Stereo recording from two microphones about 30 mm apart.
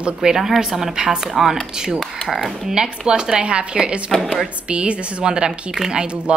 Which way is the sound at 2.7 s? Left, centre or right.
Right.